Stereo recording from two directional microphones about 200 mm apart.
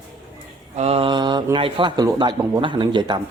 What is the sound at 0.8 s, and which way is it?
Speech, 30° right (ahead or behind).